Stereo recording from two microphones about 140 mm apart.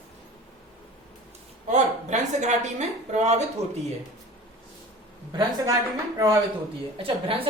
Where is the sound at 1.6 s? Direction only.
55° right (ahead or behind).